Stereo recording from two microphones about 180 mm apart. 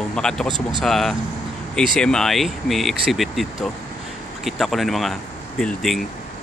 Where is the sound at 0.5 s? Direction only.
25° right (ahead or behind).